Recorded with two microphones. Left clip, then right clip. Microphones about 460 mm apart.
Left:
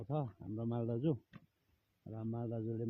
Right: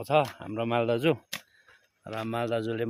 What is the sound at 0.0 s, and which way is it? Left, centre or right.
Speech, centre.